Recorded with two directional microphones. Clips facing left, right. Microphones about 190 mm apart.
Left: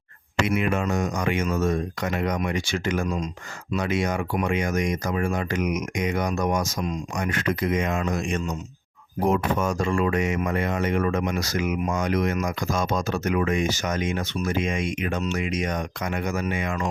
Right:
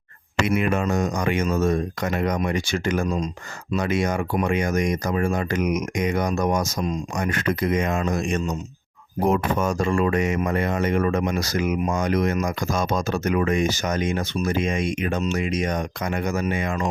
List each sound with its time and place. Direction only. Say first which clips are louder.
0.4 s speech: right 2 dB; 45° right (ahead or behind)